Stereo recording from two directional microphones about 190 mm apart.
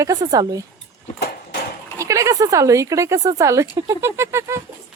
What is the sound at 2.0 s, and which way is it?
A woman's voice, 15° right (ahead or behind).